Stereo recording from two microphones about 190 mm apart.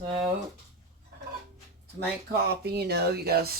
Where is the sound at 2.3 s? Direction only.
60° right (ahead or behind).